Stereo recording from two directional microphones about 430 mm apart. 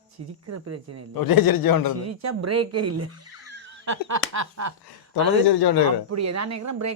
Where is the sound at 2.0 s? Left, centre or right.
Right.